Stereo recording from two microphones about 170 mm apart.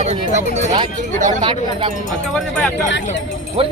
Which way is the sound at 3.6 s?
35° right (ahead or behind).